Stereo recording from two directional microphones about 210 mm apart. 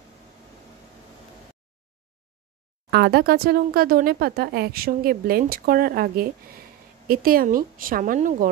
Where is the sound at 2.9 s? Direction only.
50° right (ahead or behind).